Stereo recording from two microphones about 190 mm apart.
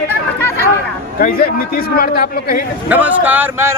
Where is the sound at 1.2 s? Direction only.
50° left (ahead or behind).